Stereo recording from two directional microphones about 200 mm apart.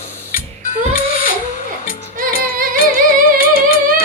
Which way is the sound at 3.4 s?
45° left (ahead or behind).